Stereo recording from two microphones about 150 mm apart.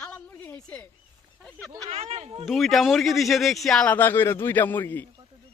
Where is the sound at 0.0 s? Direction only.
10° left (ahead or behind).